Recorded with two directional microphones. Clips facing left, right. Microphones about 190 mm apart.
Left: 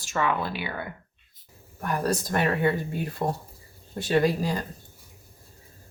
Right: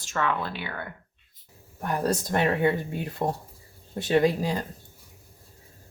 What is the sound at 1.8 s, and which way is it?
Speech, 25° right (ahead or behind).